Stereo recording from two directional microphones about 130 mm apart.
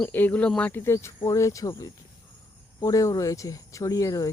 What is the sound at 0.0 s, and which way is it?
Speech, 15° left (ahead or behind).